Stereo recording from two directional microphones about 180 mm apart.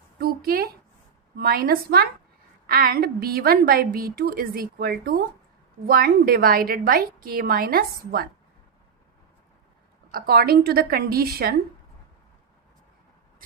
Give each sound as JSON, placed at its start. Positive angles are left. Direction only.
{"t": 0.2, "sound": "a sound", "side_deg": -55}
{"t": 1.4, "sound": "a woman's voice", "side_deg": -55}
{"t": 10.1, "sound": "a woman's voice", "side_deg": -55}